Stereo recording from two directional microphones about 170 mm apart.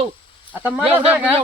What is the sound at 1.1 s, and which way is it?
Speech, 5° right (ahead or behind).